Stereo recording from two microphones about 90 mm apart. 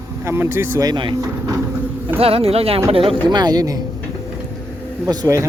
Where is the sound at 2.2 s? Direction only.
90° right.